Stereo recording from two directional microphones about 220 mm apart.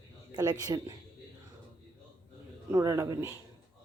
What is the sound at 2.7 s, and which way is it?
Speech, 15° right (ahead or behind).